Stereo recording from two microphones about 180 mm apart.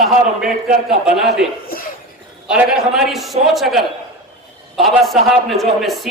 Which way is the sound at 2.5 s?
5° right (ahead or behind).